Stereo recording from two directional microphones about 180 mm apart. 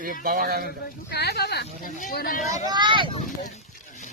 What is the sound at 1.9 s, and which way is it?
Speech, 50° left (ahead or behind).